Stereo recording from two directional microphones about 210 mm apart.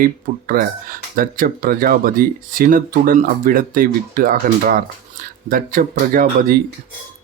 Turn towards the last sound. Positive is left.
turn(degrees=-45)  # may be behind; listen again after turning